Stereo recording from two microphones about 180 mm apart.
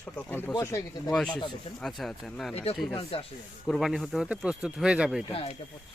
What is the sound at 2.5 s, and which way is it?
Speech, 35° left (ahead or behind).